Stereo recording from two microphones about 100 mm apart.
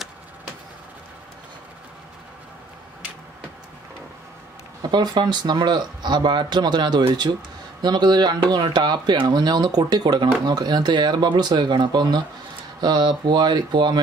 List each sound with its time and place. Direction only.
4.8 s speech: 45° right (ahead or behind)